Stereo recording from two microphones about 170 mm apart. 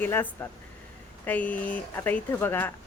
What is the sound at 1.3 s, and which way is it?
A woman's voice, 10° left (ahead or behind).